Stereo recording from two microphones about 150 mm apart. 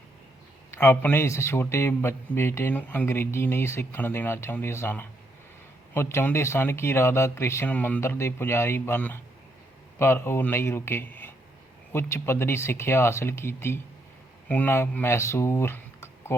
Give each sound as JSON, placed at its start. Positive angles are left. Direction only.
{"t": 0.7, "sound": "a man's voice", "side_deg": 15}